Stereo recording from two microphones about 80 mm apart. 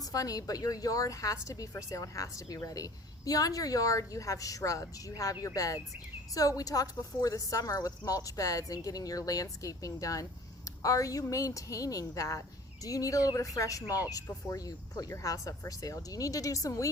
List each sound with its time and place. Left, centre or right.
0.0 s a woman's voice: left